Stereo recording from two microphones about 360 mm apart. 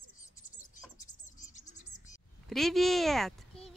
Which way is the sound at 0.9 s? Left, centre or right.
Left.